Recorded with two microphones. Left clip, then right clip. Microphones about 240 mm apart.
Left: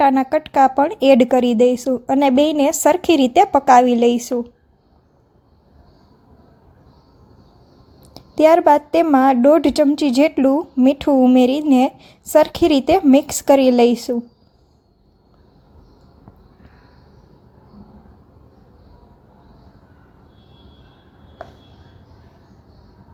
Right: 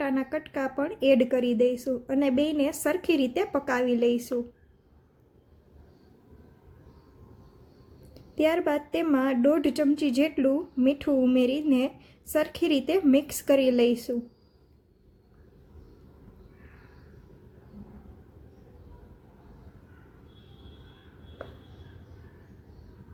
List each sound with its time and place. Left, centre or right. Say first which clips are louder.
0.0 s a woman's voice: left 15 dB; left
8.1 s a woman's voice: left 13 dB; left